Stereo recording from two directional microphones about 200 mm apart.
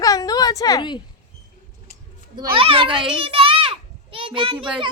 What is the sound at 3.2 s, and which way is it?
Children playing, 25° right (ahead or behind).